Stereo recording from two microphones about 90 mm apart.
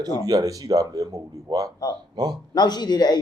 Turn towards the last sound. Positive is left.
turn(degrees=50)  # may be behind; listen again after turning